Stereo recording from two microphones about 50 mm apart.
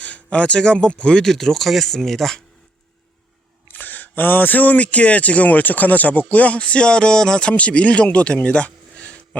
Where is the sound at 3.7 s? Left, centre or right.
Left.